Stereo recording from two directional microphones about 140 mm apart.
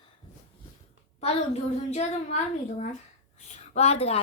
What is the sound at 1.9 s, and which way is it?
Child singing, 55° left (ahead or behind).